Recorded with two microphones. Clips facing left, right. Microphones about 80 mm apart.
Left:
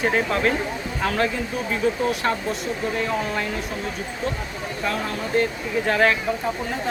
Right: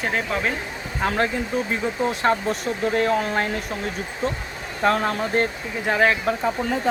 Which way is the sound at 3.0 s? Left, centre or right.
Right.